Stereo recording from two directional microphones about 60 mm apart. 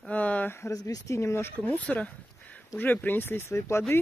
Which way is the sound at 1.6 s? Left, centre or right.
Left.